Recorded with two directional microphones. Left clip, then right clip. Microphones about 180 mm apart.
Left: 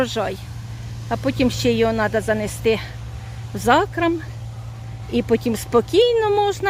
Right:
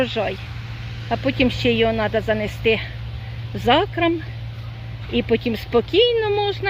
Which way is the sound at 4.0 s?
5° left (ahead or behind).